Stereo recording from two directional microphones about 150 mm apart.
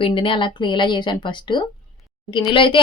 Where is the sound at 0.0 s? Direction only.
35° left (ahead or behind).